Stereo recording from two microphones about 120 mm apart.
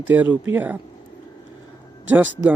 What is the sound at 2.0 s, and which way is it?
Speech, 15° right (ahead or behind).